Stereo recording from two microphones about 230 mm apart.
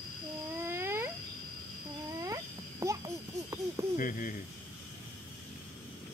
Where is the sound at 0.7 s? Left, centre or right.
Centre.